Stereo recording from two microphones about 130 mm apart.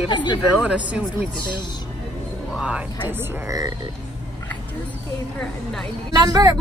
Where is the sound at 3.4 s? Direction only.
30° right (ahead or behind).